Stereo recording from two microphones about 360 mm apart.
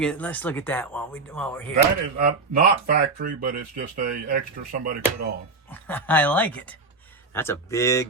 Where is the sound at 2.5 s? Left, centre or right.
Right.